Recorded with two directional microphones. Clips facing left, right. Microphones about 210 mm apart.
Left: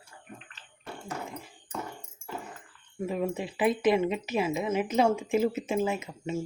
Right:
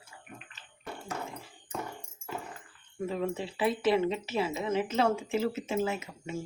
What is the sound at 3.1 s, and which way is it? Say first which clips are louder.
Speech: left 2 dB; 15° left (ahead or behind).